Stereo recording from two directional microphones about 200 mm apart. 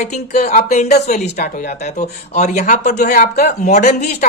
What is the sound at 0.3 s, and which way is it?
Speech, 35° left (ahead or behind).